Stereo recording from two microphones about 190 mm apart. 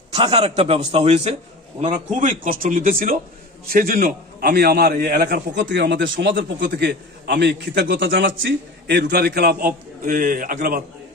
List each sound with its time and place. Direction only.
0.1 s a man's voice: 30° right (ahead or behind)
2.1 s a man's voice: 45° right (ahead or behind); by 8.3 s 70° right (ahead or behind)
8.4 s a man's voice: 60° right (ahead or behind)